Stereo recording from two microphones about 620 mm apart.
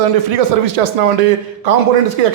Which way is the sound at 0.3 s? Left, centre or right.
Right.